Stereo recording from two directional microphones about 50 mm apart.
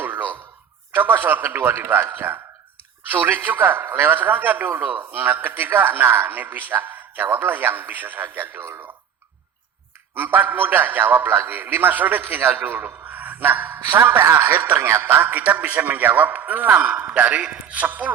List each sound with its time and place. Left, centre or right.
0.0 s a sound: right
0.9 s a man's voice: right
4.1 s a man's voice: right
10.2 s a man's voice: right
17.8 s speech: right